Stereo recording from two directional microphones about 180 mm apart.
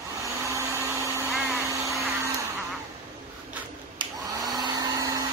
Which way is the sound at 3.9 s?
25° right (ahead or behind).